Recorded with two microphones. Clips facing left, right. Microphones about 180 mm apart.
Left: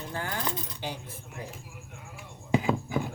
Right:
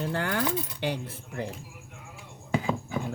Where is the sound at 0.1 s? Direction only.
70° right (ahead or behind).